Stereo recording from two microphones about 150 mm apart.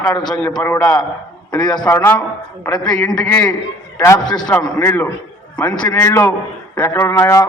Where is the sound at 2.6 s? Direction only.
5° left (ahead or behind).